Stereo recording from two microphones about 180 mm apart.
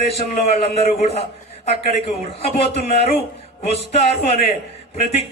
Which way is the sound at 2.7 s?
35° left (ahead or behind).